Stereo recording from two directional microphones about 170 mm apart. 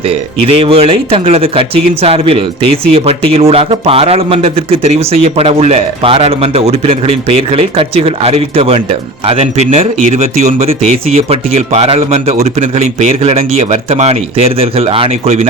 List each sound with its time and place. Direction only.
0.1 s a man's voice: 35° right (ahead or behind)